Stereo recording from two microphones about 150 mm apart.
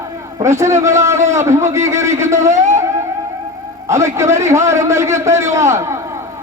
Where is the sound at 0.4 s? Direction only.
20° right (ahead or behind).